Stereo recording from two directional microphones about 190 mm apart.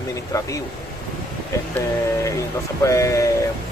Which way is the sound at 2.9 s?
15° left (ahead or behind).